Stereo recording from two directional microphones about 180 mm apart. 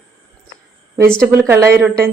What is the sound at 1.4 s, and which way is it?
Speech, 15° right (ahead or behind).